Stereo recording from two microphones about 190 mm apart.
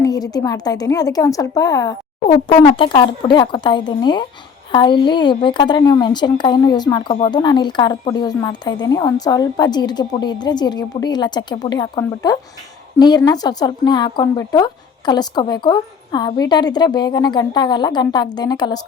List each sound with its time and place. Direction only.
0.0 s a woman's voice: 20° left (ahead or behind)